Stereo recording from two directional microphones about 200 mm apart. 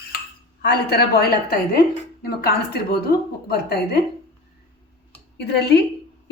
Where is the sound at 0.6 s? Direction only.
55° left (ahead or behind).